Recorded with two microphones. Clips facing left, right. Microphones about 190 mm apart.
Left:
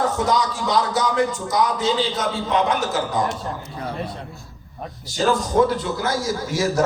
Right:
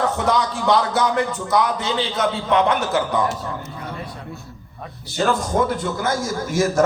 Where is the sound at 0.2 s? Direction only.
60° right (ahead or behind).